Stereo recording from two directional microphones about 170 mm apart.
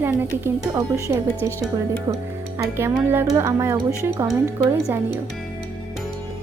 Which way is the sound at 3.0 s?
15° right (ahead or behind).